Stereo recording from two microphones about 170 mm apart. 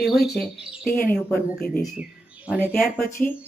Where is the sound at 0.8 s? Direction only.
60° left (ahead or behind).